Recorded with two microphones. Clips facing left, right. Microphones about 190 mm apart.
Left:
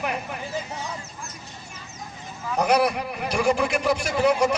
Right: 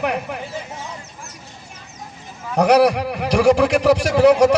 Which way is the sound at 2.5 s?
75° right (ahead or behind).